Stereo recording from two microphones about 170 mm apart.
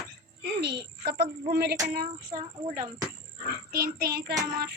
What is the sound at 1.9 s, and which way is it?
Speech, 60° right (ahead or behind).